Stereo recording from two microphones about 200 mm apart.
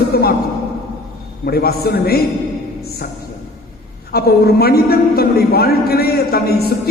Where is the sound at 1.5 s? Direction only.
50° left (ahead or behind).